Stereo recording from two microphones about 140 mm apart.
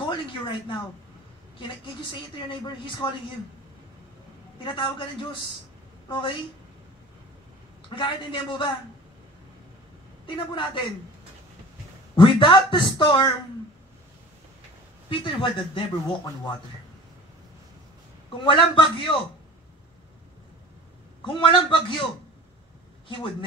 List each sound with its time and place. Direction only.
0.0 s a sound: 35° left (ahead or behind)
1.6 s speech: 35° left (ahead or behind)
4.6 s a woman's voice: 35° left (ahead or behind)
7.9 s speech: 35° left (ahead or behind)
10.2 s speech: 35° left (ahead or behind)
12.2 s speech: 35° left (ahead or behind)
15.0 s speech: 35° left (ahead or behind)
18.4 s speech: 35° left (ahead or behind)
21.2 s speech: 35° left (ahead or behind)
23.0 s speech: 35° left (ahead or behind)